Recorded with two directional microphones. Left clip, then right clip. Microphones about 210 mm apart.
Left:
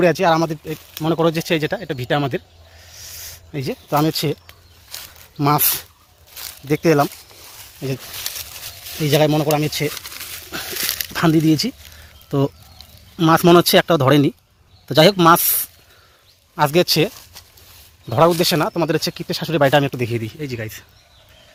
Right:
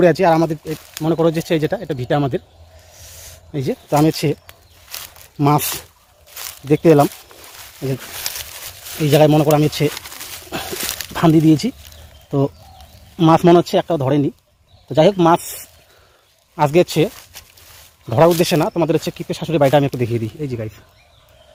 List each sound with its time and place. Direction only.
0.0 s speech: 5° right (ahead or behind)
0.6 s speech: 5° left (ahead or behind)
2.8 s a sound: centre (ahead or behind)
5.4 s speech: 5° right (ahead or behind)
6.7 s speech: 10° right (ahead or behind)
9.0 s speech: 5° right (ahead or behind)
9.6 s speech: 20° right (ahead or behind)
9.9 s bird: 10° right (ahead or behind)
10.7 s a sound: 5° right (ahead or behind)
13.1 s speech: centre (ahead or behind)
16.6 s speech: centre (ahead or behind)